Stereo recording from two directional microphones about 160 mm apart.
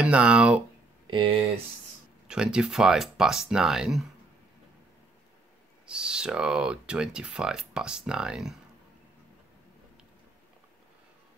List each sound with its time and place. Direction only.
0.0 s speech: 5° right (ahead or behind)
1.1 s speech: 35° right (ahead or behind)
2.2 s speech: 5° right (ahead or behind)
5.9 s speech: 5° right (ahead or behind)